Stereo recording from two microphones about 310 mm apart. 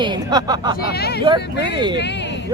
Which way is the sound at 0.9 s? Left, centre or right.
Left.